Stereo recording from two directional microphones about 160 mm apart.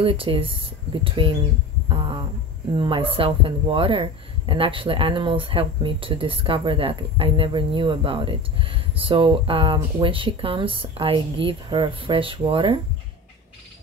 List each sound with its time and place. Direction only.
0.0 s speech: 35° right (ahead or behind)
1.9 s hum: 30° right (ahead or behind)
2.7 s speech: 30° right (ahead or behind)